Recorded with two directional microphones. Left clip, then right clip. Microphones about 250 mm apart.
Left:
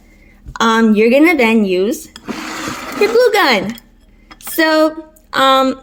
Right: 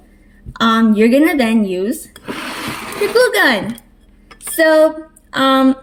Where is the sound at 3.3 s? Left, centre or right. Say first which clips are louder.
Left 1 dB; left.